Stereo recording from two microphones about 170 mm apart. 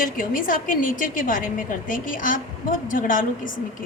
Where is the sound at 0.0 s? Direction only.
55° left (ahead or behind).